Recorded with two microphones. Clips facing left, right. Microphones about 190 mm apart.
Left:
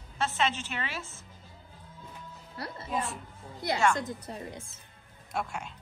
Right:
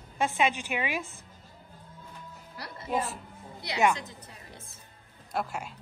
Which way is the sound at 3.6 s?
50° left (ahead or behind).